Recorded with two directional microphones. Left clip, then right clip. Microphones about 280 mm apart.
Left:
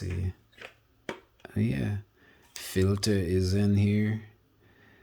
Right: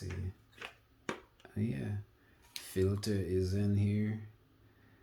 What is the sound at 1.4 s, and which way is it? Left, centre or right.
Speech, left.